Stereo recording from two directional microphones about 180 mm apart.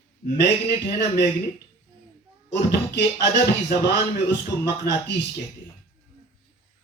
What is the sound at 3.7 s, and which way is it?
Music, 65° left (ahead or behind).